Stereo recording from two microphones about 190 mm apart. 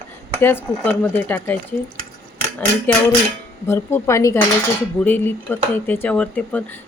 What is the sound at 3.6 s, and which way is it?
Speech, 15° left (ahead or behind).